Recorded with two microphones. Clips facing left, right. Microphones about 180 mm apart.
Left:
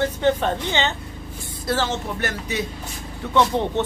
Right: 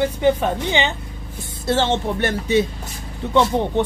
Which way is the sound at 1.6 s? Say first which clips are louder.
Right 5 dB; 25° right (ahead or behind).